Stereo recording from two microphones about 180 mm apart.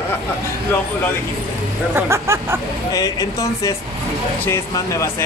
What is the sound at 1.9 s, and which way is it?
Speech, 15° right (ahead or behind).